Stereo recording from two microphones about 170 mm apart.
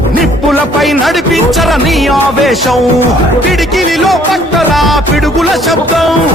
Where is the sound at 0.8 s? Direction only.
Centre (ahead or behind).